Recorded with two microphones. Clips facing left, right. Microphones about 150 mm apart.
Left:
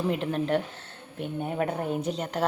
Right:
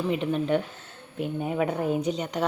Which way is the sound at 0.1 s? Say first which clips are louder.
Right 4 dB; centre (ahead or behind).